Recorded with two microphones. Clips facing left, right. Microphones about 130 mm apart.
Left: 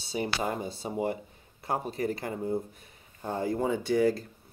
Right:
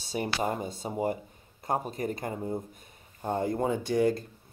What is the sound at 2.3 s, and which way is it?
Speech, 20° right (ahead or behind).